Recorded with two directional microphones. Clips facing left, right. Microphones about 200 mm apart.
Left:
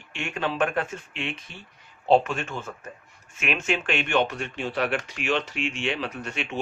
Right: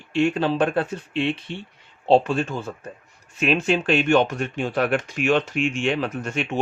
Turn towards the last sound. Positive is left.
turn(degrees=-45)  # may be behind; listen again after turning